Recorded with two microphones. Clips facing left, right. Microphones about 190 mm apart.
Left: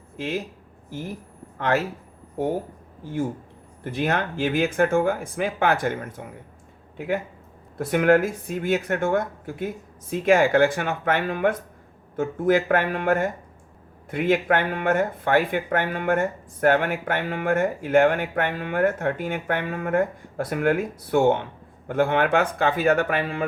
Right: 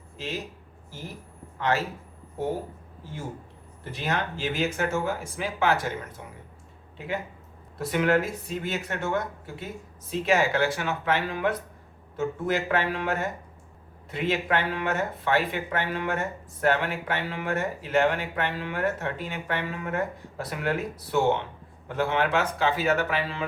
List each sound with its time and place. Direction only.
0.2 s speech: 55° left (ahead or behind)
1.5 s speech: 55° left (ahead or behind)
3.9 s speech: 55° left (ahead or behind)
7.8 s speech: 50° left (ahead or behind)